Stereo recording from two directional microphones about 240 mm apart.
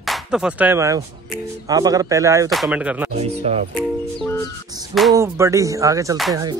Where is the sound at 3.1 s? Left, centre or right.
Right.